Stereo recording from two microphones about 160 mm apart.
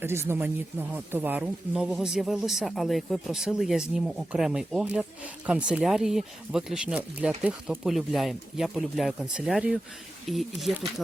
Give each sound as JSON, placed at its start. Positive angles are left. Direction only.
{"t": 0.0, "sound": "speech", "side_deg": -15}